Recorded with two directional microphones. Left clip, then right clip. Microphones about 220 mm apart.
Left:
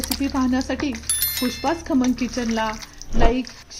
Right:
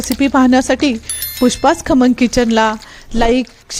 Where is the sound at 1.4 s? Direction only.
45° right (ahead or behind).